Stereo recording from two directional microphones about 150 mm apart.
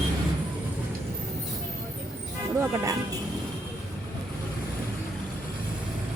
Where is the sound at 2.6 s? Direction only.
20° right (ahead or behind).